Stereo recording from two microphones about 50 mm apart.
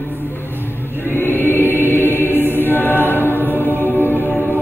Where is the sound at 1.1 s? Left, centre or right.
Left.